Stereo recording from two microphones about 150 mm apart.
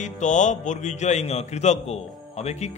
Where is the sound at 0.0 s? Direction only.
55° left (ahead or behind).